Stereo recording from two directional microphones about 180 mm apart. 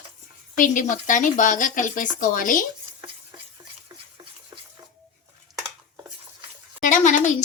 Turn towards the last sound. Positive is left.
turn(degrees=45)  # may be behind; listen again after turning